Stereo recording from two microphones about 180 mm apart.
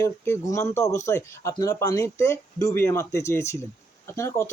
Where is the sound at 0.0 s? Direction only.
15° left (ahead or behind).